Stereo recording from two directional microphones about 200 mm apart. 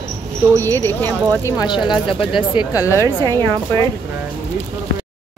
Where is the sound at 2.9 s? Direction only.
15° right (ahead or behind).